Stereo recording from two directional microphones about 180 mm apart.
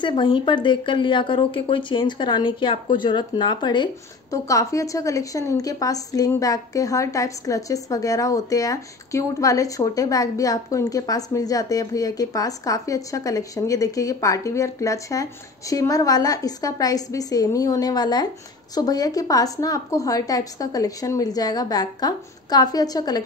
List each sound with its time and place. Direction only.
0.0 s speech: 25° left (ahead or behind)